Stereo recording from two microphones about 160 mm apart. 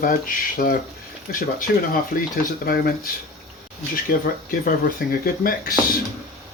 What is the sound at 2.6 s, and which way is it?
Speech, 70° left (ahead or behind).